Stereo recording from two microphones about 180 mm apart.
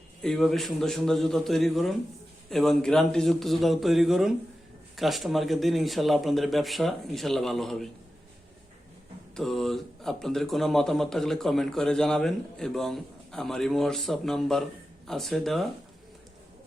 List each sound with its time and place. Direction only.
0.2 s speech: centre (ahead or behind)
9.3 s speech: centre (ahead or behind)